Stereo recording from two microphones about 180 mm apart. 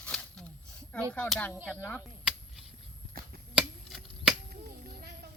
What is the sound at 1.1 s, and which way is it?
Speech, 10° left (ahead or behind).